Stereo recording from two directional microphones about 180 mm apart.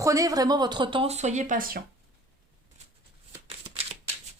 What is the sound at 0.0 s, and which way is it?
Speech, 20° right (ahead or behind).